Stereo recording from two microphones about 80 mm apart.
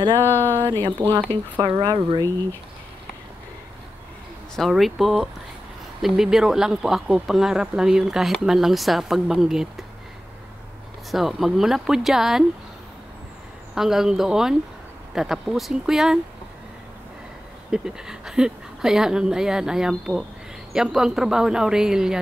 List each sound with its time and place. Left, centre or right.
0.3 s speech: left
1.0 s speech: right
4.6 s a woman's voice: centre
11.1 s speech: centre
13.7 s speech: centre
17.6 s a woman's voice: centre